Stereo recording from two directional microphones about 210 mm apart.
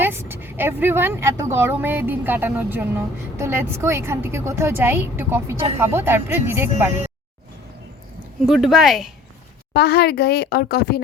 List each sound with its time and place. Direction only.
0.0 s a woman's voice: 10° right (ahead or behind)
8.4 s speech: centre (ahead or behind)
9.7 s a woman's voice: 50° left (ahead or behind)